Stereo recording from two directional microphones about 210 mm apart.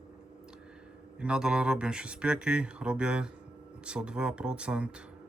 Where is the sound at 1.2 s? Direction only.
5° right (ahead or behind).